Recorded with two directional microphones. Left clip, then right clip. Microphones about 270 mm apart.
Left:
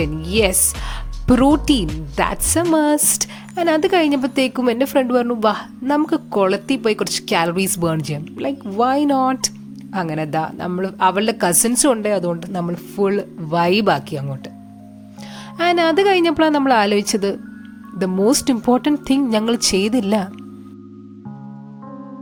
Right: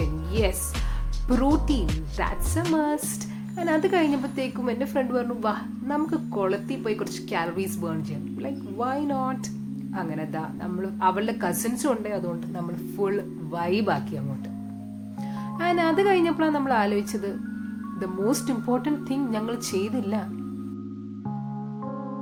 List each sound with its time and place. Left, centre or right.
0.0 s a woman's voice: left
15.5 s a woman's voice: left